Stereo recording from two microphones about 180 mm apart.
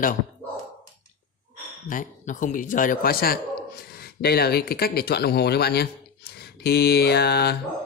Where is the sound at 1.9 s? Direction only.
45° left (ahead or behind).